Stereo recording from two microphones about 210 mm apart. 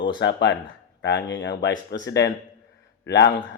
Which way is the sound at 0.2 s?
55° left (ahead or behind).